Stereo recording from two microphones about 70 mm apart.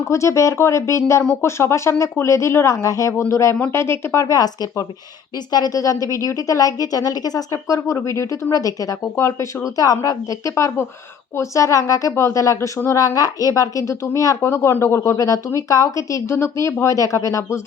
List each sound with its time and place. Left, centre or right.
0.0 s a woman's voice: left
7.5 s speech: left
9.7 s a woman's voice: left
10.5 s speech: left
11.3 s speech: left
14.4 s speech: left
15.5 s speech: left